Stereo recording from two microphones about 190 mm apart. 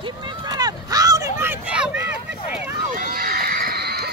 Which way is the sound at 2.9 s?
50° right (ahead or behind).